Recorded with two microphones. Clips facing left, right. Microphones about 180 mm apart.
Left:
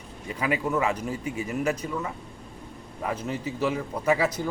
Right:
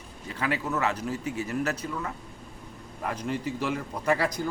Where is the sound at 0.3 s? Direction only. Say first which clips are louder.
Left 3 dB; 5° left (ahead or behind).